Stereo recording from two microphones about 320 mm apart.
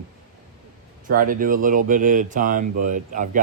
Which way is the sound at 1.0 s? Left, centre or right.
Right.